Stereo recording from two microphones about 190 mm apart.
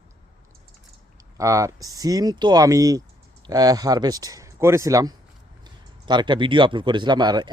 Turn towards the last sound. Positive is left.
turn(degrees=-20)  # may be behind; listen again after turning